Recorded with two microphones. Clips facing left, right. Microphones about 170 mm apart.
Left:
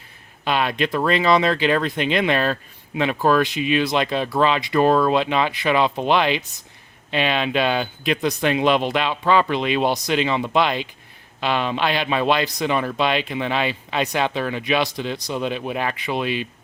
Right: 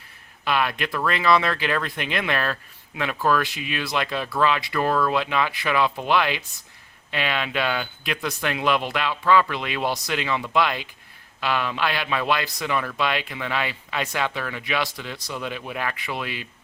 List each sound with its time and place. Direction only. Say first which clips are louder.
0.4 s speech: left 3 dB; 20° left (ahead or behind)